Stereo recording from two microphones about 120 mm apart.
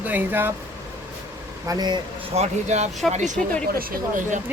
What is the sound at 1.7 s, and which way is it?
Speech, 35° right (ahead or behind).